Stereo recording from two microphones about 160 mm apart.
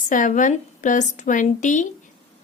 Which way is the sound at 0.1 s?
55° left (ahead or behind).